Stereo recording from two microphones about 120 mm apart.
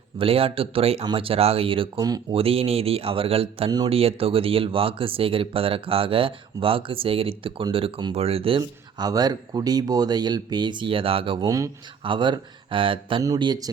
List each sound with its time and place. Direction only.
0.2 s speech: 50° right (ahead or behind)
2.0 s speech: 30° right (ahead or behind)
2.3 s speech: 55° right (ahead or behind)
9.0 s speech: 35° right (ahead or behind)
11.4 s speech: 25° right (ahead or behind)
12.0 s speech: 40° right (ahead or behind)
13.2 s speech: 30° right (ahead or behind)